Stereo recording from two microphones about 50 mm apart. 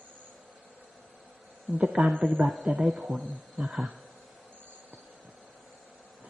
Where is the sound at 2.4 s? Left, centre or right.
Centre.